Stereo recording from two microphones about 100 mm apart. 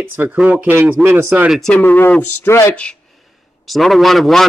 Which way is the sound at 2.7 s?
5° left (ahead or behind).